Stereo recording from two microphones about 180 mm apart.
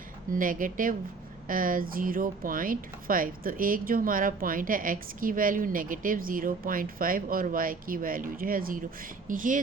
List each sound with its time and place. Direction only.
0.3 s speech: 50° right (ahead or behind)